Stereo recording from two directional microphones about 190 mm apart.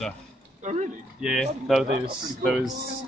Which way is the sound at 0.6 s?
40° right (ahead or behind).